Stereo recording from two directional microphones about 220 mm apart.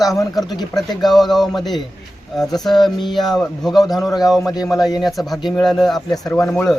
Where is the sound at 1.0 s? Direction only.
Centre (ahead or behind).